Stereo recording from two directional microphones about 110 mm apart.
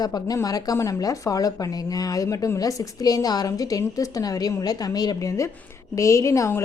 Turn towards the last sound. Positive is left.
turn(degrees=30)  # may be behind; listen again after turning